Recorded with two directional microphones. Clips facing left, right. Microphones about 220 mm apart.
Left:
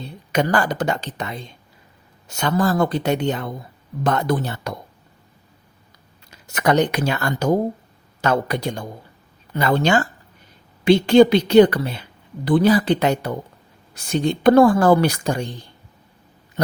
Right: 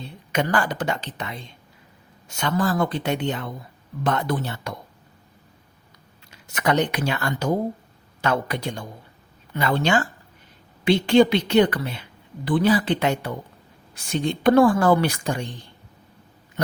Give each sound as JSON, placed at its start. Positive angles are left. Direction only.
{"t": 0.3, "sound": "a woman's voice", "side_deg": 40}
{"t": 6.5, "sound": "a woman's voice", "side_deg": 40}